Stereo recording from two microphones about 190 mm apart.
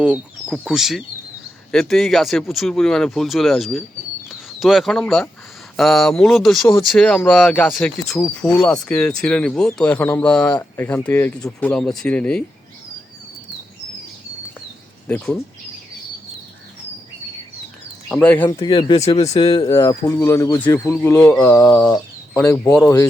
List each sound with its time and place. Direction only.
0.0 s speech: 5° right (ahead or behind)
15.0 s speech: 10° left (ahead or behind)
18.1 s speech: 5° left (ahead or behind)
18.4 s speech: 20° left (ahead or behind)
21.2 s speech: 5° left (ahead or behind)
22.4 s speech: 15° left (ahead or behind)